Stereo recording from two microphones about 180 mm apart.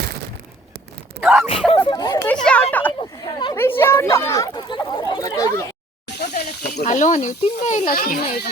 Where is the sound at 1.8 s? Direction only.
20° left (ahead or behind).